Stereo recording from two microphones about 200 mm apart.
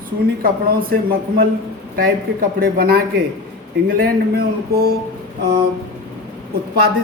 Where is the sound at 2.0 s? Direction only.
45° right (ahead or behind).